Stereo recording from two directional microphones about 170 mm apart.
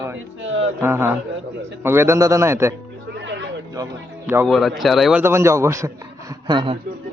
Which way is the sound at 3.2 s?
90° right.